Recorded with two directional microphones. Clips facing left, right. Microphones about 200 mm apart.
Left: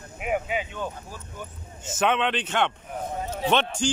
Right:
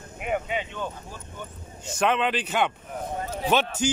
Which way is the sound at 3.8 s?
10° right (ahead or behind).